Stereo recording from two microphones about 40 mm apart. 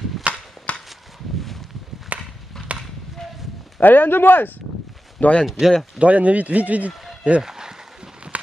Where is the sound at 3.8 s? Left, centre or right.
Left.